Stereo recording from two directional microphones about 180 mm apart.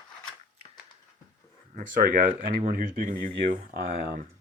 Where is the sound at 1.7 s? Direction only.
50° right (ahead or behind).